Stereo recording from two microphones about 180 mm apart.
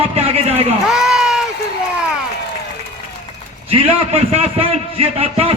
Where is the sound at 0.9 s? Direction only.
Centre (ahead or behind).